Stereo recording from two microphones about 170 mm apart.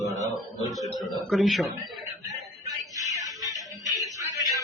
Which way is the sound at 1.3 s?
Centre (ahead or behind).